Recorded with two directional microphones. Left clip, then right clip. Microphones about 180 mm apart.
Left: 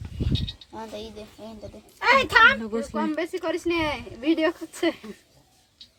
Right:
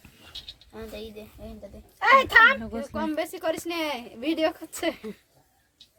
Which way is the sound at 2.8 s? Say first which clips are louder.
Left 2 dB; 70° right (ahead or behind).